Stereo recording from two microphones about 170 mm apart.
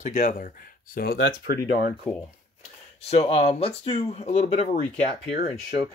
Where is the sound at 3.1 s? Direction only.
40° left (ahead or behind).